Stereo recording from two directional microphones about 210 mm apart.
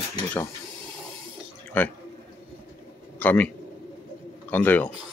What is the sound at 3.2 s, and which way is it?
A man's voice, 5° left (ahead or behind).